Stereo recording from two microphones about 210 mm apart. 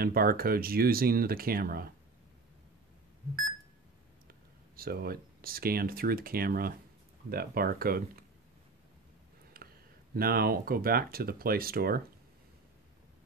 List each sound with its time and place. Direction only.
0.0 s speech: 45° right (ahead or behind)
4.7 s speech: 45° right (ahead or behind)
9.6 s a sound: 45° right (ahead or behind)
10.1 s speech: 45° right (ahead or behind)